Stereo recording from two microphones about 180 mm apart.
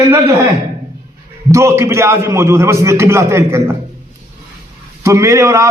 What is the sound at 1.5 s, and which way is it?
A man's voice, 15° right (ahead or behind).